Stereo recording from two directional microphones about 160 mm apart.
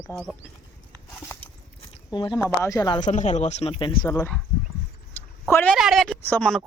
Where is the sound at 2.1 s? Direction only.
30° left (ahead or behind).